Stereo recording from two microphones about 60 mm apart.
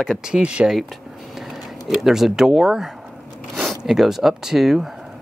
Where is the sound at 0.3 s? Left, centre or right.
Centre.